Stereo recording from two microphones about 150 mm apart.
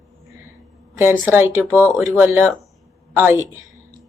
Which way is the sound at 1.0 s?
15° right (ahead or behind).